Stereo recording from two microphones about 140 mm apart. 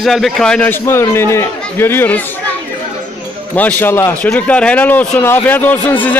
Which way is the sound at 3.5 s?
10° left (ahead or behind).